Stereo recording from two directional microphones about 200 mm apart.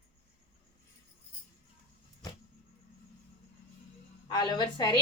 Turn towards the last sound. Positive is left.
turn(degrees=25)  # may be behind; listen again after turning